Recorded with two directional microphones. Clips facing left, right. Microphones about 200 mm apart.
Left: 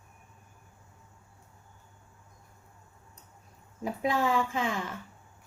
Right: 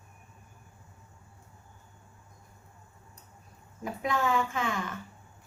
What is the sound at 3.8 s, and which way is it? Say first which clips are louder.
A woman's voice: left 2 dB; 30° left (ahead or behind).